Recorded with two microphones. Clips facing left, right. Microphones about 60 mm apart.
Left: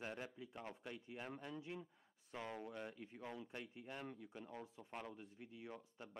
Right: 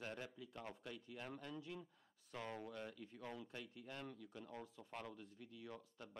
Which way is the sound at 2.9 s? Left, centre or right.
Left.